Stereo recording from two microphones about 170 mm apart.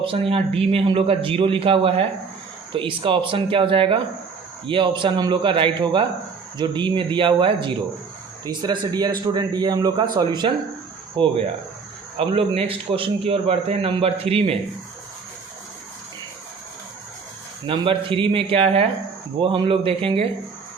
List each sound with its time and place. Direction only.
0.0 s a man's voice: 30° right (ahead or behind)
17.7 s a man's voice: 30° right (ahead or behind)